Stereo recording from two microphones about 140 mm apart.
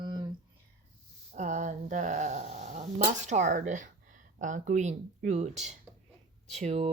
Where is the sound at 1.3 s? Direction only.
60° right (ahead or behind).